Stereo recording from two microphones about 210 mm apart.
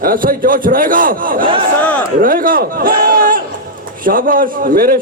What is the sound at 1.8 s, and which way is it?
Speech, 5° left (ahead or behind).